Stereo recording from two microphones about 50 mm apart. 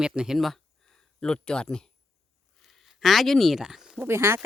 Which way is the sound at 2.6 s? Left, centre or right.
Centre.